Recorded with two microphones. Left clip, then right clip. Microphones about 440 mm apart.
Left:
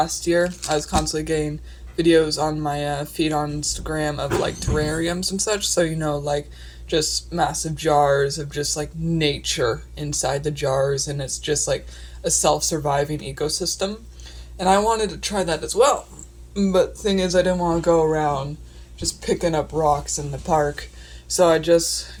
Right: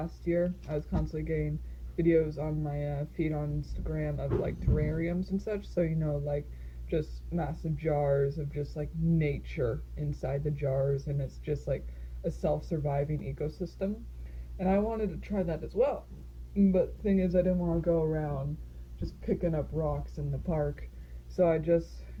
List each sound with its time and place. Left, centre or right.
0.0 s speech: centre